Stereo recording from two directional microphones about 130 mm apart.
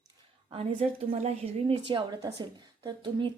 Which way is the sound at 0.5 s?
55° right (ahead or behind).